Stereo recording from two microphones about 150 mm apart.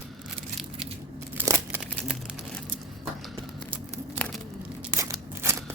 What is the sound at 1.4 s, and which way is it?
Crumpling, 15° right (ahead or behind).